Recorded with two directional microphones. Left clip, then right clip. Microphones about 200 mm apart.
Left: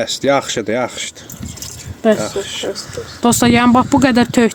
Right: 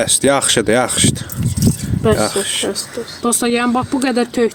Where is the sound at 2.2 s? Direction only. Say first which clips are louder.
Right 4 dB; 25° right (ahead or behind).